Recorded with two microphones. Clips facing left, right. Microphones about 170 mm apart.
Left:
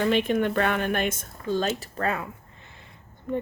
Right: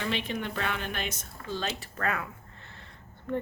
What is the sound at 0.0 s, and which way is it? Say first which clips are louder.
Speech: left 10 dB; 50° left (ahead or behind).